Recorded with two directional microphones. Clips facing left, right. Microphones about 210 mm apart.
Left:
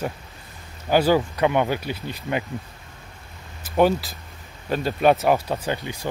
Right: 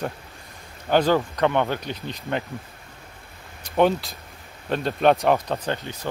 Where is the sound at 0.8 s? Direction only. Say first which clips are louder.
Left 1 dB; 5° left (ahead or behind).